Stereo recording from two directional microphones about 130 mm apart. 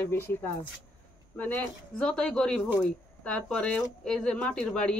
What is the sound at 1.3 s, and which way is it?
A woman's voice, 10° left (ahead or behind).